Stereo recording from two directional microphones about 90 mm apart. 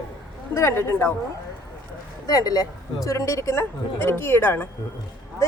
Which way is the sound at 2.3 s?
45° left (ahead or behind).